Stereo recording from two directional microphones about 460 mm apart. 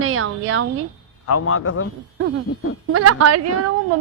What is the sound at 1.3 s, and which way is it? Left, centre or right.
Speech, left.